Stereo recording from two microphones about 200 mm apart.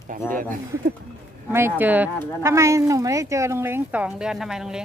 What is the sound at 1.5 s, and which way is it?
Speech, 10° right (ahead or behind).